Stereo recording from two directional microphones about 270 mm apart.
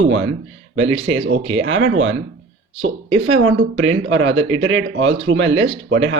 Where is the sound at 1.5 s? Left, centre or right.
Right.